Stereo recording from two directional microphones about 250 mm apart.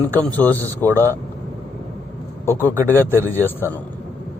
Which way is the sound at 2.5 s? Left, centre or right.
Centre.